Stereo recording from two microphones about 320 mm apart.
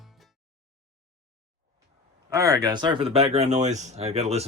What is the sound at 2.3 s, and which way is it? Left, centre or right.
Speech, centre.